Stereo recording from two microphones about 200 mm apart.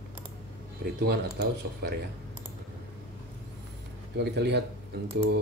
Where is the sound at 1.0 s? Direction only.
55° right (ahead or behind).